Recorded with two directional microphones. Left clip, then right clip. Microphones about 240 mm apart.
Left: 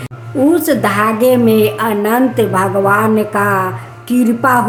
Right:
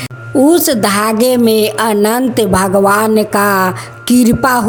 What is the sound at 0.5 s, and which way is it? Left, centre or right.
A woman's voice, right.